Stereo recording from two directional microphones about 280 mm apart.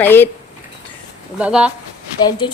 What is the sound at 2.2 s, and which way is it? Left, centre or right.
Speech, centre.